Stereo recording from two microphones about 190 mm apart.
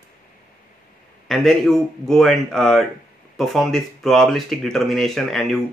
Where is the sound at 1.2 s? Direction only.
Centre (ahead or behind).